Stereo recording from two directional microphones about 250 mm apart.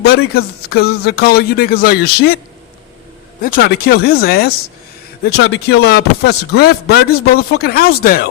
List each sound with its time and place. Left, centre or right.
0.0 s speech: left
3.4 s speech: left